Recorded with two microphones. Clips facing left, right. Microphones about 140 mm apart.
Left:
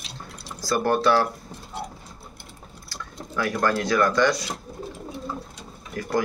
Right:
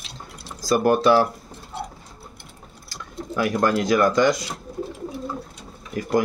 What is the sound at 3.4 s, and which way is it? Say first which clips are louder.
Speech: right 3 dB; 15° right (ahead or behind).